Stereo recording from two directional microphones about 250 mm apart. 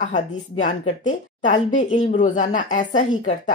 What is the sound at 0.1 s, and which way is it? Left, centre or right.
A woman's voice, left.